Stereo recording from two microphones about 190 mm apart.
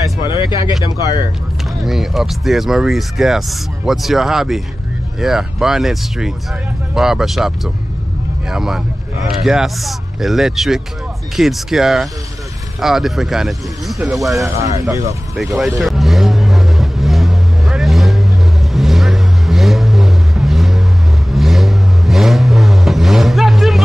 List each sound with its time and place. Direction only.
0.3 s speech: 25° left (ahead or behind)
1.9 s speech: centre (ahead or behind)
14.7 s speech: 15° right (ahead or behind)
15.8 s vehicle: centre (ahead or behind)